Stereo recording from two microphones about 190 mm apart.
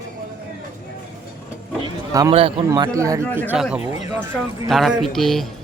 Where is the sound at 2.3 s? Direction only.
30° right (ahead or behind).